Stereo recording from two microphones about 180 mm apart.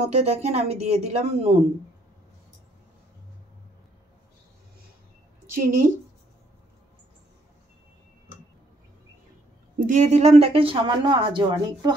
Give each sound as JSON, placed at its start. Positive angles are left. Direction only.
{"t": 0.0, "sound": "speech", "side_deg": -40}
{"t": 5.5, "sound": "a woman's voice", "side_deg": -50}
{"t": 9.8, "sound": "speech", "side_deg": -45}